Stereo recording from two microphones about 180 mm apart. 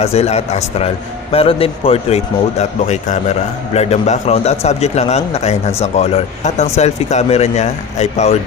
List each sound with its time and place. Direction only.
0.0 s a man's voice: 35° left (ahead or behind)